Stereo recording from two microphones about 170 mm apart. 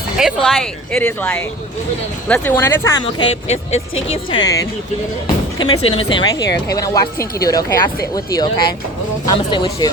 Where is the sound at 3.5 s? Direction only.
40° left (ahead or behind); by 4.7 s 20° left (ahead or behind).